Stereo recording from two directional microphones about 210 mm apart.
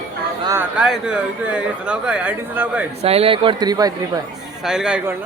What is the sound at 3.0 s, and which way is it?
Speech, 30° right (ahead or behind).